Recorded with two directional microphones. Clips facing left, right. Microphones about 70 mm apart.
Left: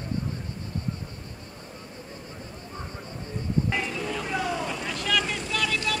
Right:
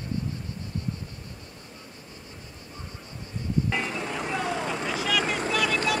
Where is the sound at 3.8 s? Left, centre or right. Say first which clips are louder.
Even; right.